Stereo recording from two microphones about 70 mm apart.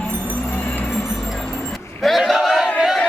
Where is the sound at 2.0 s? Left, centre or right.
Centre.